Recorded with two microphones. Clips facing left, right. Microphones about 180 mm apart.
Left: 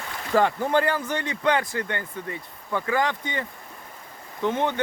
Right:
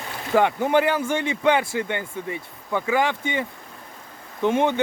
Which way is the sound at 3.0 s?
25° right (ahead or behind).